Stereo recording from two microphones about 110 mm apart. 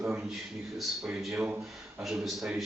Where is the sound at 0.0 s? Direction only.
5° right (ahead or behind).